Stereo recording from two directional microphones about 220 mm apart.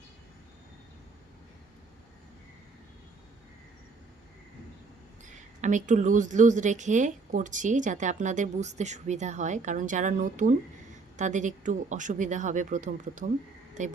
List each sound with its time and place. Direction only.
5.6 s a woman's voice: 35° right (ahead or behind)